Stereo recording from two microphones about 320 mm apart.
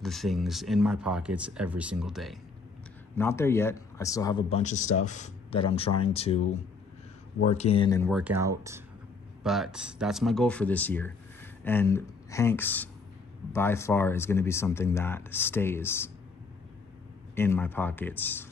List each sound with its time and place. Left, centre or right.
0.0 s speech: centre
7.4 s speech: centre
8.1 s speech: centre
17.4 s speech: centre